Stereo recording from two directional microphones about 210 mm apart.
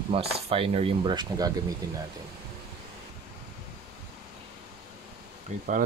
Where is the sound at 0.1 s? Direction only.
25° right (ahead or behind).